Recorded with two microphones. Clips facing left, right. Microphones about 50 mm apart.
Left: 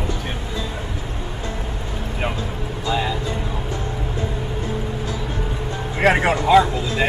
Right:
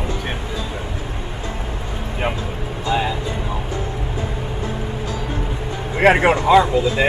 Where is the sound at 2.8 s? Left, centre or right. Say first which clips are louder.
Right 2 dB; centre.